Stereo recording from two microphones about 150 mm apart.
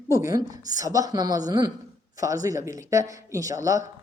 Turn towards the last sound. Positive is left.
turn(degrees=-20)  # may be behind; listen again after turning